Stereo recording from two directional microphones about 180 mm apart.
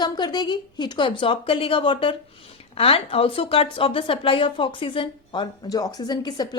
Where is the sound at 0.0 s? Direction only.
25° left (ahead or behind).